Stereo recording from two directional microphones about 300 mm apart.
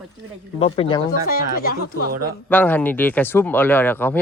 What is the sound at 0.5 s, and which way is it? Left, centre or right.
Speech, centre.